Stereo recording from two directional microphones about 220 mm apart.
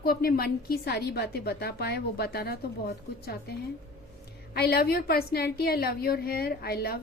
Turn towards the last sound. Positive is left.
turn(degrees=45)  # may be behind; listen again after turning